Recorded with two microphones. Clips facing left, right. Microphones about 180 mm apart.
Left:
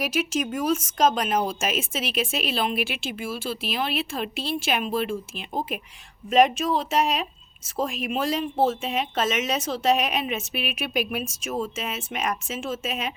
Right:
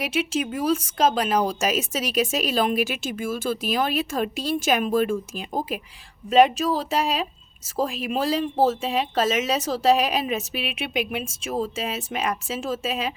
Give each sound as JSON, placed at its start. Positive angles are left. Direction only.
{"t": 0.0, "sound": "a woman's voice", "side_deg": -30}